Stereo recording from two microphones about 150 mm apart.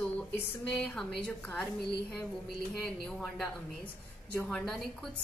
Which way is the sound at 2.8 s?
Centre (ahead or behind).